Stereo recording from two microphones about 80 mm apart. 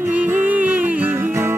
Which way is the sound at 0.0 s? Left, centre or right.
Right.